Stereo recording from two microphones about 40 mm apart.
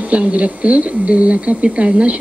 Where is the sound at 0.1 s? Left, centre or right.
Right.